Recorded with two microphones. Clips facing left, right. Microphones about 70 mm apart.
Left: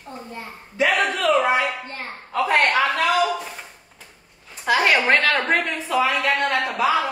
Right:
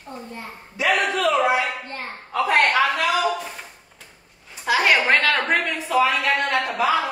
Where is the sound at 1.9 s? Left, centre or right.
Centre.